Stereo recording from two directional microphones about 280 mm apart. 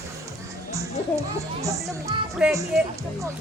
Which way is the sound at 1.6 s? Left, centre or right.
Centre.